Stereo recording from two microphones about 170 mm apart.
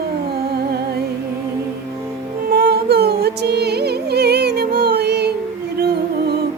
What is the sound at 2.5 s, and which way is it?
Music, 70° right (ahead or behind).